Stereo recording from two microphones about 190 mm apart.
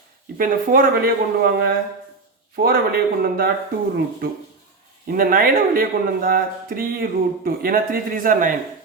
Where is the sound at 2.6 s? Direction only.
50° right (ahead or behind).